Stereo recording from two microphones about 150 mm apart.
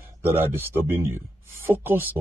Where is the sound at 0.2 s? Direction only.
15° right (ahead or behind).